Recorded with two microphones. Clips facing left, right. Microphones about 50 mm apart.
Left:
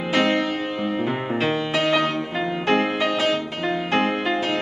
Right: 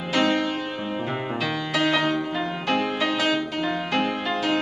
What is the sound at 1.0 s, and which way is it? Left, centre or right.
Music, centre.